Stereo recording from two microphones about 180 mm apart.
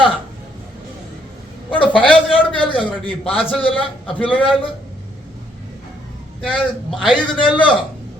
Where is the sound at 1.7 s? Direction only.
30° left (ahead or behind).